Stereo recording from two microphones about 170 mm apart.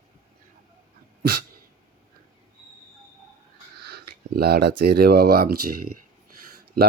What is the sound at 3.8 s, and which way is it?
Speech, 70° right (ahead or behind).